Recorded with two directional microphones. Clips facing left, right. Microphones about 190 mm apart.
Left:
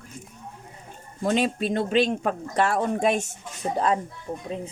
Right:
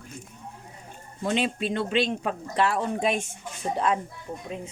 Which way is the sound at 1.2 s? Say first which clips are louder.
Left 3 dB; 40° left (ahead or behind).